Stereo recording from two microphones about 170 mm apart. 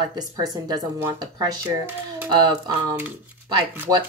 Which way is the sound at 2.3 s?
25° right (ahead or behind).